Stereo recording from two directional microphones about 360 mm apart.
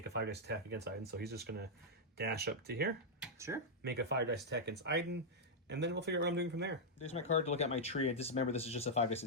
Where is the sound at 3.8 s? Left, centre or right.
Right.